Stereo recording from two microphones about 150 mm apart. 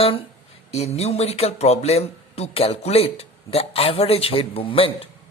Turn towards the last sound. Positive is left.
turn(degrees=40)  # may be behind; listen again after turning